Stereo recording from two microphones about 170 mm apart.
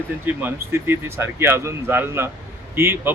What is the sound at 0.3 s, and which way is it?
Speech, 10° right (ahead or behind).